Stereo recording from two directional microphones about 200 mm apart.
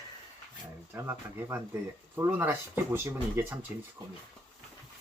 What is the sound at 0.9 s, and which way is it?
Speech, 15° right (ahead or behind).